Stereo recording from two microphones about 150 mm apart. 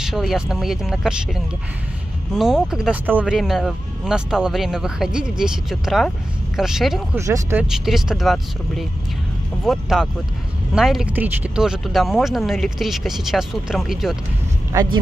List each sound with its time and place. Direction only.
0.0 s speech: centre (ahead or behind)
7.2 s speech: 20° right (ahead or behind)
7.6 s speech: 5° right (ahead or behind)
14.7 s speech: 25° right (ahead or behind)